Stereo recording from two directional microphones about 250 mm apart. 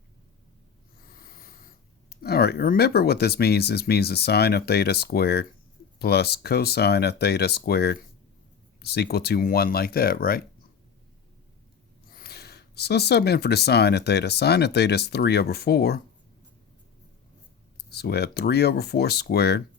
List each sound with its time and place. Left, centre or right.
1.1 s speech: left
12.1 s speech: left
17.8 s speech: left